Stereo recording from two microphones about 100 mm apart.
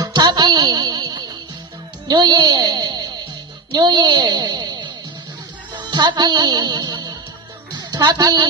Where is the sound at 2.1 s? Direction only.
45° right (ahead or behind).